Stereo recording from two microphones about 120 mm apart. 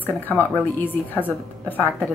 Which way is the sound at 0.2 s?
15° left (ahead or behind).